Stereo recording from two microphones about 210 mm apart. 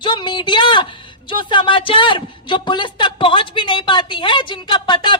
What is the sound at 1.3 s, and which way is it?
A woman's voice, 25° left (ahead or behind).